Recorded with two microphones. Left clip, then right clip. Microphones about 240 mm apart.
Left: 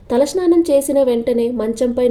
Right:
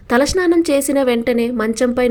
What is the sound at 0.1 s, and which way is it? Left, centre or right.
A woman's voice, right.